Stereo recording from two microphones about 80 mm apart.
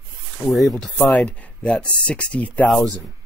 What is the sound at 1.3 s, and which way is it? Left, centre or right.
Speech, centre.